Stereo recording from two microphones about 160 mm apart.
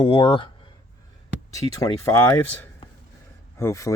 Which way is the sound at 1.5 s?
20° left (ahead or behind).